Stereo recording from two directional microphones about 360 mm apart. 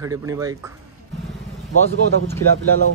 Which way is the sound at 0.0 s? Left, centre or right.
Centre.